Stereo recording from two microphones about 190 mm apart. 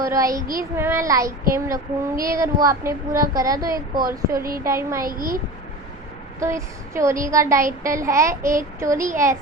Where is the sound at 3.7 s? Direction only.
50° right (ahead or behind).